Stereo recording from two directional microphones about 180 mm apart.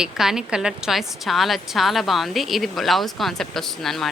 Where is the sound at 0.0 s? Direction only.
5° right (ahead or behind).